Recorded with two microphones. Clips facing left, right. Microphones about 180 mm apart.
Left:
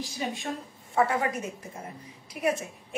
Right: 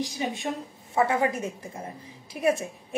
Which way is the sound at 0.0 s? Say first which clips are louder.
Right 3 dB; 20° right (ahead or behind).